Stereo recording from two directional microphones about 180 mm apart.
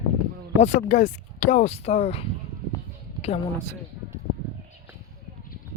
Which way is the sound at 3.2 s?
35° left (ahead or behind).